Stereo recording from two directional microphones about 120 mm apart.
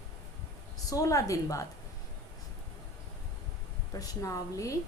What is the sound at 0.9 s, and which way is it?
Speech, 30° left (ahead or behind).